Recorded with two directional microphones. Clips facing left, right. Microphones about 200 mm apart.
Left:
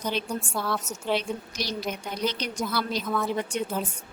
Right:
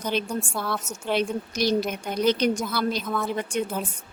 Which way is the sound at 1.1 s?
50° right (ahead or behind).